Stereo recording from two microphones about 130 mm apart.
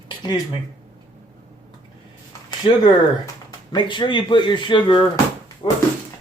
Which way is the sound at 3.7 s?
40° left (ahead or behind).